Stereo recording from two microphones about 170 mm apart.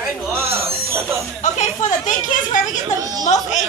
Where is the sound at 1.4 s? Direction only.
45° left (ahead or behind).